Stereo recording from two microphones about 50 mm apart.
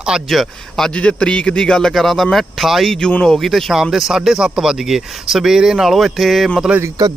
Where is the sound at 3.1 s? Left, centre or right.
Centre.